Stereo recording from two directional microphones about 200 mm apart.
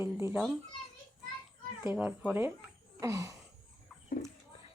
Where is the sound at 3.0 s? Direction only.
15° right (ahead or behind).